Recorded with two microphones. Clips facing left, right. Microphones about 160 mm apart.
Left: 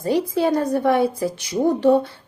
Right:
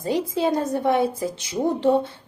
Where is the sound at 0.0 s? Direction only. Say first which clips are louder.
Left 3 dB; 20° right (ahead or behind).